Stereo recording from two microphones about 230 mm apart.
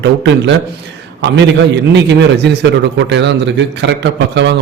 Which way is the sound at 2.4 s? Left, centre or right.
Right.